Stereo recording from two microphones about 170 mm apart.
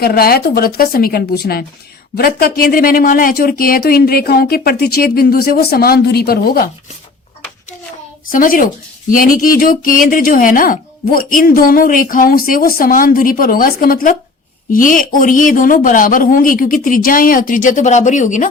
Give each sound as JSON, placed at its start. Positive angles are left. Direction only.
{"t": 0.0, "sound": "speech", "side_deg": 65}
{"t": 8.3, "sound": "speech", "side_deg": 55}